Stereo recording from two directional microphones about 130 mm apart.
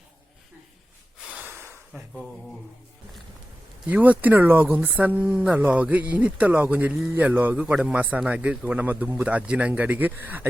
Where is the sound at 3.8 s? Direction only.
10° right (ahead or behind).